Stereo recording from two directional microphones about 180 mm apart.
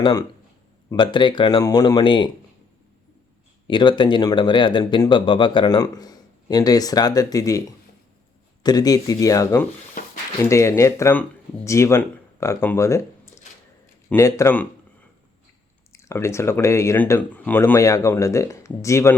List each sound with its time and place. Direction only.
0.0 s speech: 20° left (ahead or behind)
3.7 s speech: 25° left (ahead or behind)
8.6 s speech: 20° left (ahead or behind)
10.0 s a sound: 50° left (ahead or behind)
10.5 s speech: 15° left (ahead or behind)
15.9 s speech: 15° left (ahead or behind)